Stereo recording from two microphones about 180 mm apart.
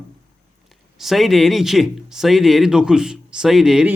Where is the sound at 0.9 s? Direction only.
Centre (ahead or behind).